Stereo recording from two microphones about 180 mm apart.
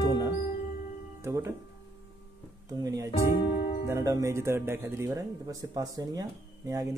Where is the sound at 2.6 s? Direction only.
20° right (ahead or behind).